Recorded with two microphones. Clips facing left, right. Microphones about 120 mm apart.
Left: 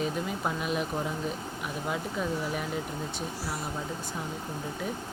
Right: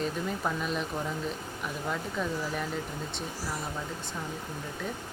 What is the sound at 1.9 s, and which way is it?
Speech, 10° left (ahead or behind).